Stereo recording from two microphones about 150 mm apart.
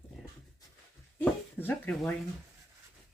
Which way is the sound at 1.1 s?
10° left (ahead or behind).